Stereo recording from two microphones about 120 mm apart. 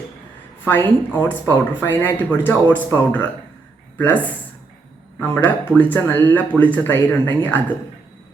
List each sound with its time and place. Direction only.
0.6 s speech: 15° left (ahead or behind)
5.3 s speech: 15° left (ahead or behind)